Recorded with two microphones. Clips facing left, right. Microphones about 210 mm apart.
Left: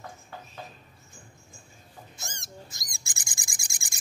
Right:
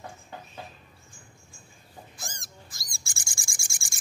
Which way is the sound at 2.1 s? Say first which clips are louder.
Left 4 dB; 25° left (ahead or behind).